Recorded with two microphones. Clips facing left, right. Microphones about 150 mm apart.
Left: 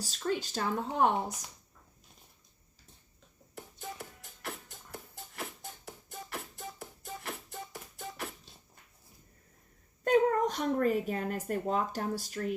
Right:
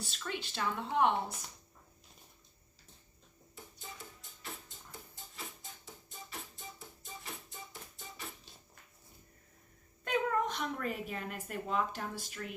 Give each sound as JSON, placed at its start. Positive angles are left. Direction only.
{"t": 0.0, "sound": "speech", "side_deg": 40}
{"t": 3.5, "sound": "music", "side_deg": 70}
{"t": 10.0, "sound": "speech", "side_deg": 40}